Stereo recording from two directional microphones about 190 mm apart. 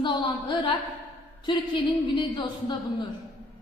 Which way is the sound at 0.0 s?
25° left (ahead or behind).